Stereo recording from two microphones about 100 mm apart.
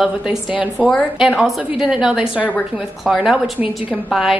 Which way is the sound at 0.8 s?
5° left (ahead or behind).